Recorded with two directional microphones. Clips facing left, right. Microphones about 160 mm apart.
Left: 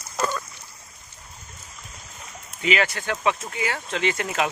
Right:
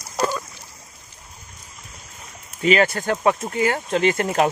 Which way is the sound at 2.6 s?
45° right (ahead or behind).